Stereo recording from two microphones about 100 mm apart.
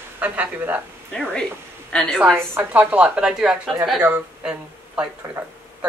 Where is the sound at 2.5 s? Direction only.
15° right (ahead or behind).